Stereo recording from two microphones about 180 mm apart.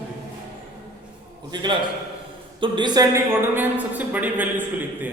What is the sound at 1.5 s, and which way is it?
A man's voice, 25° right (ahead or behind).